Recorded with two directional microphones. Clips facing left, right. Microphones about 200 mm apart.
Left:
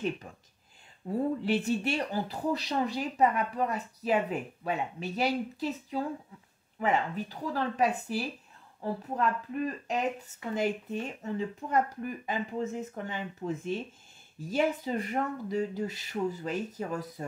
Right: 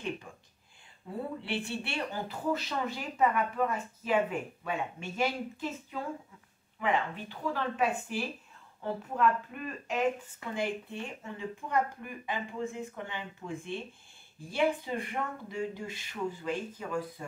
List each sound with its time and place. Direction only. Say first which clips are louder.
1.0 s speech: left 8 dB; 40° left (ahead or behind)